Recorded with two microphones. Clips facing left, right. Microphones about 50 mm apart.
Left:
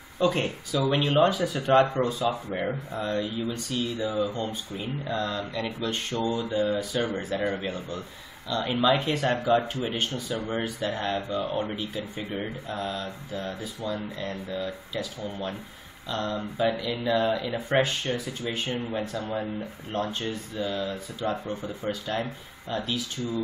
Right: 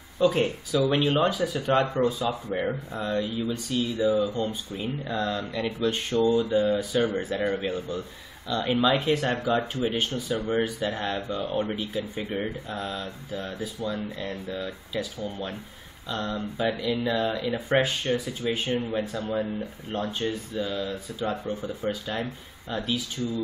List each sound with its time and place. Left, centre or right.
0.2 s speech: centre
10.1 s speech: right
10.5 s speech: centre
16.1 s speech: centre
21.1 s speech: centre
21.8 s speech: centre